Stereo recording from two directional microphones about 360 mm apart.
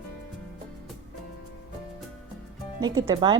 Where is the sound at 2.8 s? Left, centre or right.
Centre.